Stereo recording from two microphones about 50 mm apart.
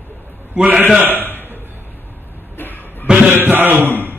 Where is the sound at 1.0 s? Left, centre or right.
Right.